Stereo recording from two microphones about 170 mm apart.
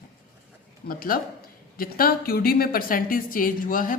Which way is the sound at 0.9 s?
55° left (ahead or behind).